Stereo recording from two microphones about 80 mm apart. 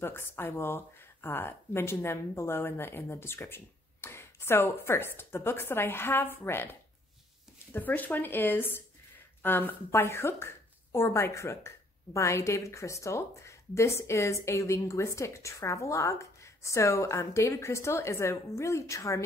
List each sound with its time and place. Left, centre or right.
0.0 s speech: left